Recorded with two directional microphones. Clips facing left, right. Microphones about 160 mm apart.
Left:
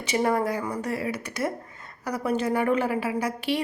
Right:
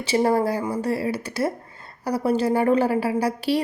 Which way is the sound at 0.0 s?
30° right (ahead or behind).